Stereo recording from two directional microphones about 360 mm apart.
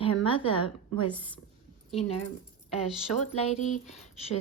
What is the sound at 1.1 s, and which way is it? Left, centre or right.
Speech, centre.